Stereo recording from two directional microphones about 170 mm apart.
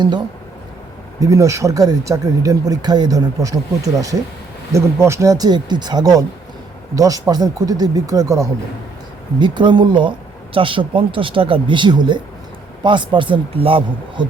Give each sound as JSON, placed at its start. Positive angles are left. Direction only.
{"t": 1.2, "sound": "speech", "side_deg": -20}